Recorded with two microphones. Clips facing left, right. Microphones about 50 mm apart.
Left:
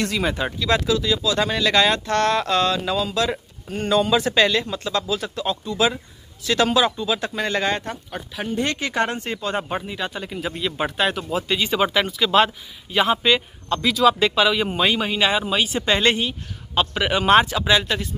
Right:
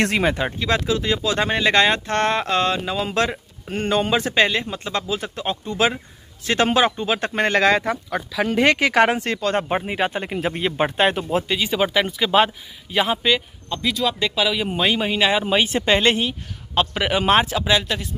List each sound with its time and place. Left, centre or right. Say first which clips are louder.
0.2 s speech: right 2 dB; right
7.6 s speech: right 6 dB; right
9.8 s speech: right 5 dB; right
10.3 s speech: right 4 dB; right
11.4 s speech: even; centre
12.1 s speech: even; centre
12.9 s speech: left 1 dB; centre
15.7 s speech: even; right
16.2 s speech: right 1 dB; centre
17.6 s speech: left 1 dB; centre